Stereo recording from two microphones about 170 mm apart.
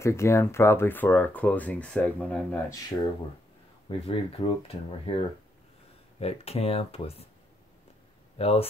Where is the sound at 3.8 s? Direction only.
35° left (ahead or behind).